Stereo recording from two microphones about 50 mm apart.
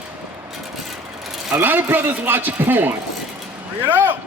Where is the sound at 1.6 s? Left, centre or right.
Right.